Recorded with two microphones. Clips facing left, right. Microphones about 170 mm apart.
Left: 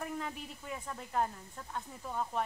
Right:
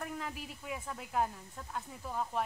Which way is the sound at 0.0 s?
Centre (ahead or behind).